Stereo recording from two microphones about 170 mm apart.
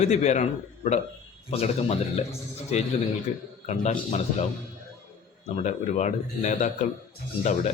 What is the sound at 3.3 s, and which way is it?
Speech, 45° left (ahead or behind).